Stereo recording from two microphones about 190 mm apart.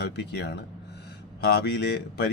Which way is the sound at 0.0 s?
60° left (ahead or behind).